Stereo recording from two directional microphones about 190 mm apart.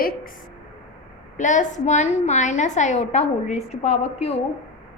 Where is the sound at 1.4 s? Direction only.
40° left (ahead or behind).